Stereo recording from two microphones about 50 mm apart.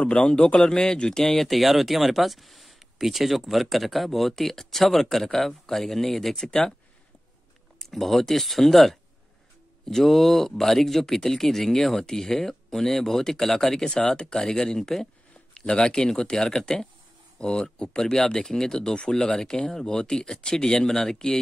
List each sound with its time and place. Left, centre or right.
0.0 s speech: centre
1.2 s speech: centre
7.8 s speech: centre
15.6 s speech: centre